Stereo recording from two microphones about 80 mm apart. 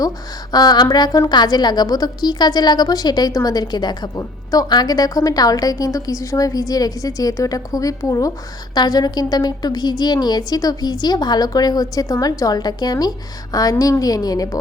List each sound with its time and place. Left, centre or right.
0.5 s a woman's voice: left
4.1 s a woman's voice: left
4.7 s a woman's voice: left
8.7 s a woman's voice: left